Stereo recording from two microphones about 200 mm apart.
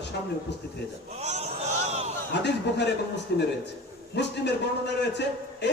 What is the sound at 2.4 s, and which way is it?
A man's voice, 60° left (ahead or behind).